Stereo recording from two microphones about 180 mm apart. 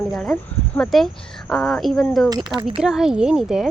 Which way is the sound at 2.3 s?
25° right (ahead or behind).